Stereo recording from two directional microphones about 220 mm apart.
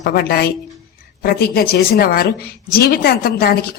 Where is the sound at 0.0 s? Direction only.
45° left (ahead or behind).